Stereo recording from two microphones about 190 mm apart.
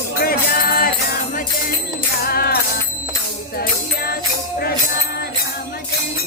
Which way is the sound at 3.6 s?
55° left (ahead or behind).